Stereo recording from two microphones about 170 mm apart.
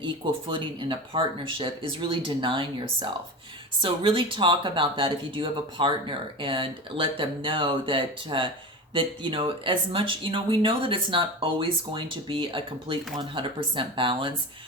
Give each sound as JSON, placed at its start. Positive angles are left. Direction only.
{"t": 0.0, "sound": "speech", "side_deg": -30}